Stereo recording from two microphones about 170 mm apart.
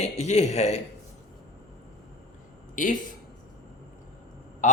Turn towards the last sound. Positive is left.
turn(degrees=50)  # may be behind; listen again after turning